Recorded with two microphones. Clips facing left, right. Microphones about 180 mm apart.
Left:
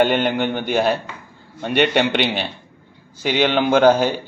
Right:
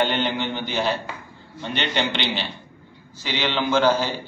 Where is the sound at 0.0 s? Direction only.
50° left (ahead or behind).